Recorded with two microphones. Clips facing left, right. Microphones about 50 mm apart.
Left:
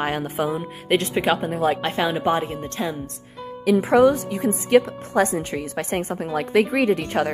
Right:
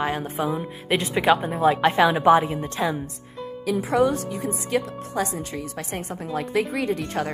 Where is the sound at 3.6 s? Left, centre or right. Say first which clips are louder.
Left 5 dB; left.